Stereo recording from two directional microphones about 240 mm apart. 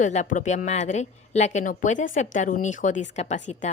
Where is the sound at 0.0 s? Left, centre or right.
Left.